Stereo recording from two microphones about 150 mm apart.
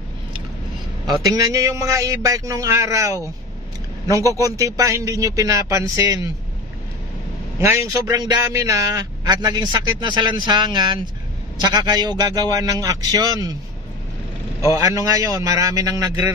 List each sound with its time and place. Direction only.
1.0 s a man's voice: 25° right (ahead or behind)
7.5 s a man's voice: 15° right (ahead or behind)
14.6 s a man's voice: 20° right (ahead or behind)